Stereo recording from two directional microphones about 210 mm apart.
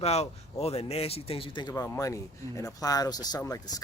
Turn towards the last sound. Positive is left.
turn(degrees=15)  # may be behind; listen again after turning